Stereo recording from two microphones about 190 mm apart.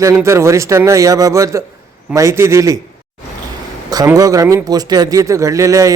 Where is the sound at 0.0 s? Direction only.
15° right (ahead or behind).